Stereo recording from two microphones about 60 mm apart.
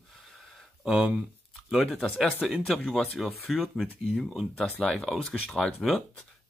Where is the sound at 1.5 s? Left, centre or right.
Centre.